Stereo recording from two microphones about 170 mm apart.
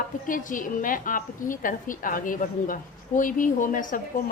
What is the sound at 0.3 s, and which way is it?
A woman's voice, 50° left (ahead or behind).